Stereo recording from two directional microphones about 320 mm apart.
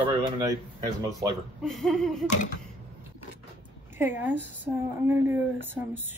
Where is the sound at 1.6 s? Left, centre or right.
Centre.